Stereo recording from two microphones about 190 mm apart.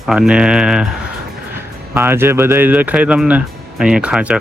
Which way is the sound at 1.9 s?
10° right (ahead or behind).